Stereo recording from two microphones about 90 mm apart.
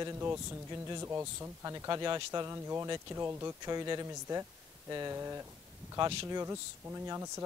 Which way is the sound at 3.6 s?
45° right (ahead or behind).